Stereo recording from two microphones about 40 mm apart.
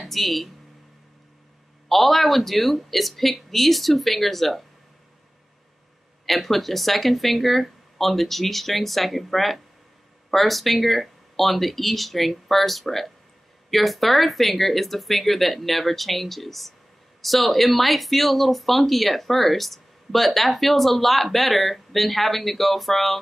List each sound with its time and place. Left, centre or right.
0.0 s speech: centre
1.9 s speech: centre
6.2 s speech: centre